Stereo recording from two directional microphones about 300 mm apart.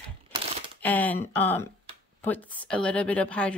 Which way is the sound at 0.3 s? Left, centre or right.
Centre.